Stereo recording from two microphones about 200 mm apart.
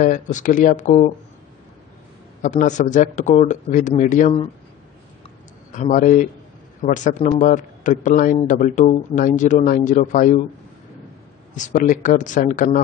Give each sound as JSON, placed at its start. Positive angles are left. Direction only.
{"t": 0.0, "sound": "a man's voice", "side_deg": 40}
{"t": 2.4, "sound": "a man's voice", "side_deg": 35}
{"t": 5.7, "sound": "a man's voice", "side_deg": 40}
{"t": 11.5, "sound": "a man's voice", "side_deg": 40}